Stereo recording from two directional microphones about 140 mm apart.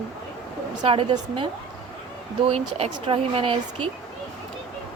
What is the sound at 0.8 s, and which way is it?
Speech, 40° right (ahead or behind).